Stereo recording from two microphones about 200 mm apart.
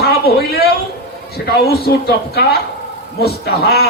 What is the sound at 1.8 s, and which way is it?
A man's voice, 50° left (ahead or behind).